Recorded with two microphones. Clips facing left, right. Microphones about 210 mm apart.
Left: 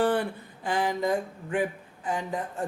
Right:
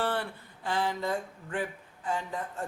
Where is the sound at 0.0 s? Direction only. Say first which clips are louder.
Left 7 dB; 15° left (ahead or behind).